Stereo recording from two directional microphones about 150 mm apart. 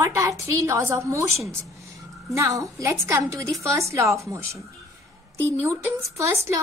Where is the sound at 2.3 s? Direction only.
20° right (ahead or behind).